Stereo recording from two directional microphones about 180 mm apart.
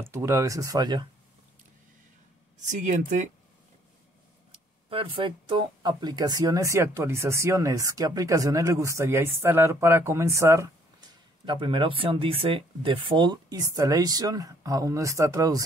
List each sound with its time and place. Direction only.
0.0 s speech: 15° right (ahead or behind)
2.7 s speech: 40° right (ahead or behind)
4.8 s speech: 30° right (ahead or behind)
11.4 s speech: 25° right (ahead or behind)